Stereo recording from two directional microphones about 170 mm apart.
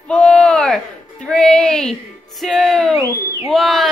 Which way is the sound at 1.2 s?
5° left (ahead or behind).